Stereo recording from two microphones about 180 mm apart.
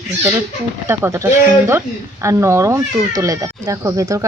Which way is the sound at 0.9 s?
15° right (ahead or behind).